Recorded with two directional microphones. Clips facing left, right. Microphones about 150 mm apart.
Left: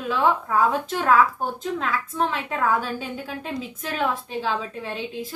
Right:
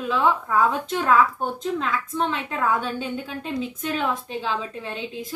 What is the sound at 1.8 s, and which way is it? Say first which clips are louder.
Speech: left 2 dB; 5° left (ahead or behind).